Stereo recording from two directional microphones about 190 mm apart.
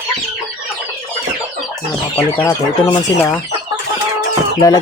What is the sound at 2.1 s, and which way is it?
Speech, 15° left (ahead or behind).